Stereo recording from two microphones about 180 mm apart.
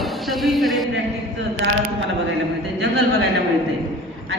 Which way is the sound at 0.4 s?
Centre (ahead or behind).